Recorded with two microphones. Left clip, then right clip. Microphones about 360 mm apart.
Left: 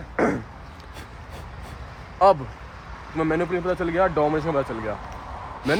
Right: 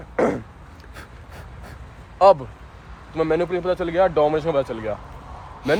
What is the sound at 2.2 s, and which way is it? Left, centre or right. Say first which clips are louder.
Speech: right 3 dB; right.